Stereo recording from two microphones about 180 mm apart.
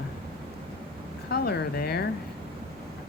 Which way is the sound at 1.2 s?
65° left (ahead or behind).